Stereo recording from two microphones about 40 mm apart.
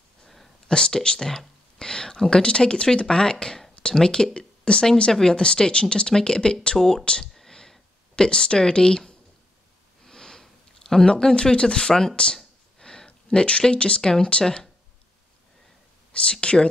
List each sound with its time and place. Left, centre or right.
0.7 s speech: centre
7.3 s a sound: centre
8.2 s speech: left
10.0 s sniff: centre
11.1 s speech: centre
12.7 s a sound: centre
14.1 s speech: centre
16.1 s speech: left